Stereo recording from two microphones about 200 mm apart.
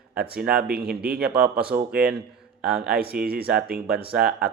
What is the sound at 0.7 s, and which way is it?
Speech, 50° right (ahead or behind).